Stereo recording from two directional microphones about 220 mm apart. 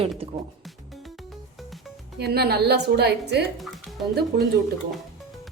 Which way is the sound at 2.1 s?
50° right (ahead or behind).